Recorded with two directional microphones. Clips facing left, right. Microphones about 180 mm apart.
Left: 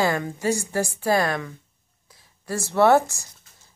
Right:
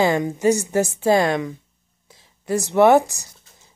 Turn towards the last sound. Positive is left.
turn(degrees=-15)  # may be behind; listen again after turning